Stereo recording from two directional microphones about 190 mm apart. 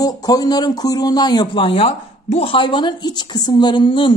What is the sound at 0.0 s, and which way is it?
Speech, 20° left (ahead or behind).